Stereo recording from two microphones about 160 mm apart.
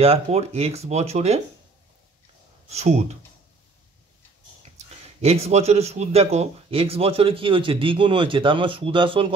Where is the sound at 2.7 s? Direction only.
40° right (ahead or behind).